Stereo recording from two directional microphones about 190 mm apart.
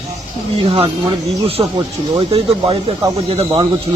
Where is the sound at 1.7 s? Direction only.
30° right (ahead or behind).